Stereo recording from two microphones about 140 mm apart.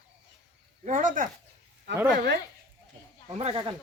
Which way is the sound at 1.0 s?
65° right (ahead or behind).